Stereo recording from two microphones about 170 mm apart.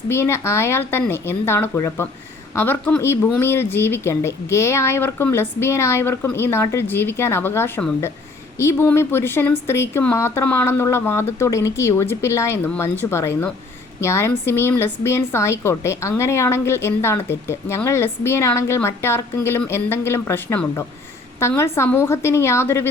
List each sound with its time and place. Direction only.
0.1 s speech: 15° left (ahead or behind)